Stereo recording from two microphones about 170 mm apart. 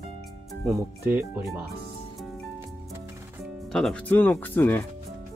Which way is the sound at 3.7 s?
5° left (ahead or behind).